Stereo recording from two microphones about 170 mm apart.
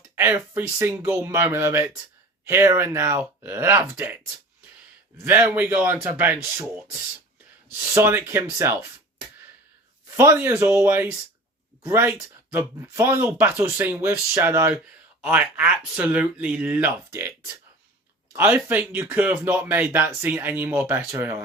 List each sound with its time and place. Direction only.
0.2 s speech: 15° right (ahead or behind)
5.2 s speech: 15° right (ahead or behind)
7.7 s speech: 15° right (ahead or behind)
10.2 s speech: 15° right (ahead or behind)